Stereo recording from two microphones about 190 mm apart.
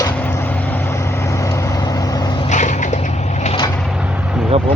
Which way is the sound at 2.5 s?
40° left (ahead or behind).